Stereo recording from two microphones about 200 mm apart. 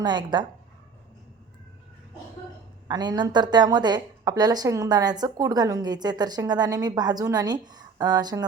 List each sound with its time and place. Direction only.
0.0 s a woman's voice: 20° right (ahead or behind)
2.8 s a woman's voice: 20° right (ahead or behind)